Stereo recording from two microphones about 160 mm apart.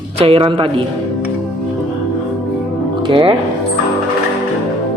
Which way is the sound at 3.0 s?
35° right (ahead or behind).